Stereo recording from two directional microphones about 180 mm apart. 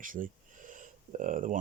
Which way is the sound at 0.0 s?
50° right (ahead or behind).